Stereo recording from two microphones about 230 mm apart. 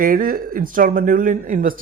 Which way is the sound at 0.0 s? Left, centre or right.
Right.